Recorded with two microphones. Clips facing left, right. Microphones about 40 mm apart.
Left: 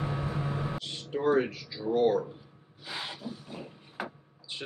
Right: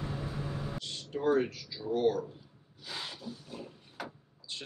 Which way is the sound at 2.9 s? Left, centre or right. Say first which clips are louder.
Left 3 dB; left.